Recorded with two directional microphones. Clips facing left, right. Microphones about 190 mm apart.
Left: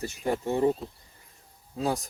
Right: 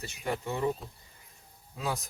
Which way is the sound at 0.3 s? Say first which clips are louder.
Left 6 dB; 40° left (ahead or behind).